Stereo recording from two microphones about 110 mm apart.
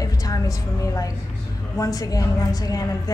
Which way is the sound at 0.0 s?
35° left (ahead or behind).